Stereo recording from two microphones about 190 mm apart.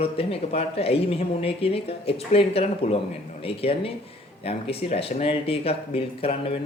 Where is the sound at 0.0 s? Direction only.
30° left (ahead or behind).